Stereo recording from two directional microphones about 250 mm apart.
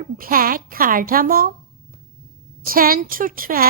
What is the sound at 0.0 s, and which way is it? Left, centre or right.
A woman's voice, right.